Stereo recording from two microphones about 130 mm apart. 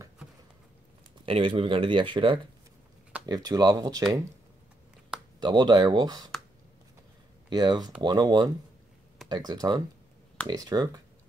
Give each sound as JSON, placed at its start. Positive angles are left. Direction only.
{"t": 1.2, "sound": "speech", "side_deg": -40}
{"t": 5.4, "sound": "speech", "side_deg": -35}
{"t": 7.4, "sound": "speech", "side_deg": -35}